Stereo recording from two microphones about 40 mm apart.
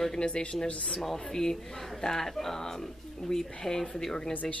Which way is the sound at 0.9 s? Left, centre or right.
Centre.